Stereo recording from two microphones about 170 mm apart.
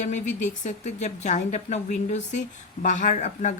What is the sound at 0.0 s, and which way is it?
Speech, 45° left (ahead or behind).